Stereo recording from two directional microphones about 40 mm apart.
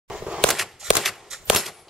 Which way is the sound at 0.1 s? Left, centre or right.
Right.